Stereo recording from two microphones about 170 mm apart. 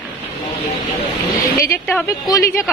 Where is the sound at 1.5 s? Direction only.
15° left (ahead or behind).